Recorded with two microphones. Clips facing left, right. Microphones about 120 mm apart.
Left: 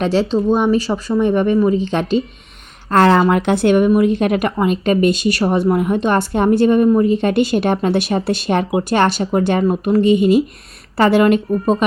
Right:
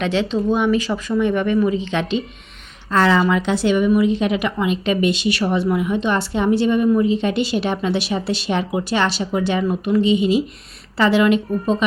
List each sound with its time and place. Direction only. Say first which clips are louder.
0.0 s a woman's voice: left 4 dB; 40° left (ahead or behind)
2.9 s a woman's voice: left 4 dB; 55° left (ahead or behind)